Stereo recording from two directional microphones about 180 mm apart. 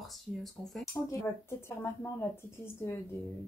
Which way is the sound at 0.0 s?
Centre (ahead or behind).